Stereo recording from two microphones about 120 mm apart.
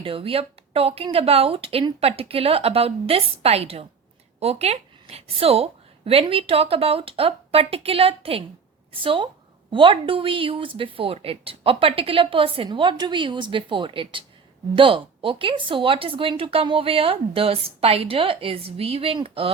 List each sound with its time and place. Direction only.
0.0 s a woman's voice: 50° right (ahead or behind)